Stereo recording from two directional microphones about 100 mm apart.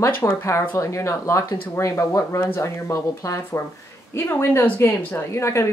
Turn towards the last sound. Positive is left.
turn(degrees=30)  # may be behind; listen again after turning